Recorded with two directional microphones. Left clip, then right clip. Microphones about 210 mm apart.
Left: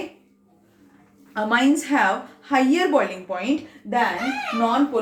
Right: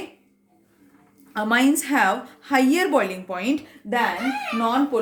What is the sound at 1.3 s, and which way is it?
A woman's voice, 50° right (ahead or behind).